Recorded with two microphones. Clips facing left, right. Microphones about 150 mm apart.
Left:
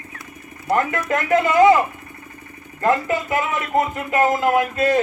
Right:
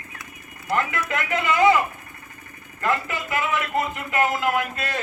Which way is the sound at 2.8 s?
40° left (ahead or behind).